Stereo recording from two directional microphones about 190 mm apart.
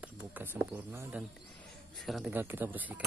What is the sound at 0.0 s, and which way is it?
Speech, 10° right (ahead or behind).